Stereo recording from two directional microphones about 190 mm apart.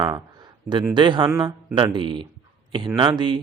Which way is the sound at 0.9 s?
25° right (ahead or behind).